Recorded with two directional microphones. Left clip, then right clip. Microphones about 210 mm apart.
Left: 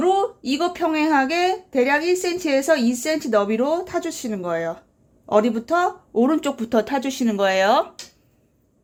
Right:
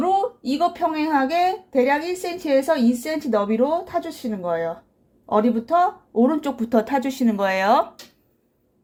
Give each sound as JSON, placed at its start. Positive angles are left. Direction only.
{"t": 0.0, "sound": "a woman's voice", "side_deg": 20}